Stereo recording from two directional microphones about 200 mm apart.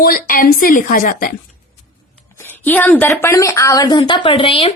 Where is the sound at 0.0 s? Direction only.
45° left (ahead or behind).